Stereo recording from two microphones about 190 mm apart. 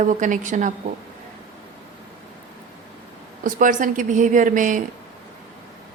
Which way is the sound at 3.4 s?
45° right (ahead or behind).